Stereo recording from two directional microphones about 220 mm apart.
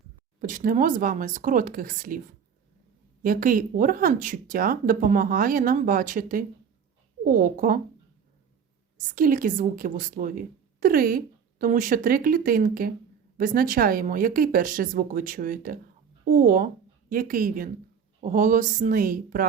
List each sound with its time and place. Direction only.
0.4 s speech: 40° right (ahead or behind)
3.2 s speech: 40° right (ahead or behind)
9.0 s speech: 40° right (ahead or behind)